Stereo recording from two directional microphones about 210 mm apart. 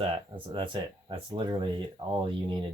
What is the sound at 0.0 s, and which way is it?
Speech, 25° right (ahead or behind).